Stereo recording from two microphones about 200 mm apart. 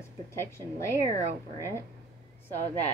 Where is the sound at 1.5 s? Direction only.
15° left (ahead or behind).